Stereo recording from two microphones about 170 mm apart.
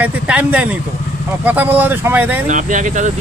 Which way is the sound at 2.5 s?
50° right (ahead or behind).